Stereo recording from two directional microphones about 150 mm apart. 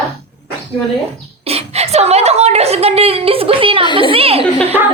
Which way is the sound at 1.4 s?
45° right (ahead or behind).